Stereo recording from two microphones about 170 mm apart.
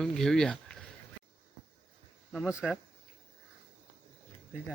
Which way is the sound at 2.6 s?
5° left (ahead or behind).